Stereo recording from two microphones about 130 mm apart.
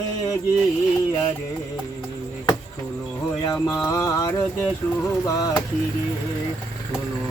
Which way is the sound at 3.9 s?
25° left (ahead or behind).